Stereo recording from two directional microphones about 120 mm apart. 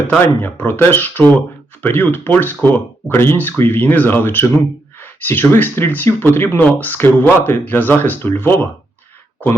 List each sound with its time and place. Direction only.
0.0 s speech: 15° left (ahead or behind)